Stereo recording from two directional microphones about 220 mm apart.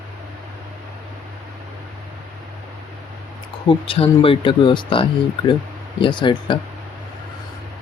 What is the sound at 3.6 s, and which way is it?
Speech, 25° left (ahead or behind).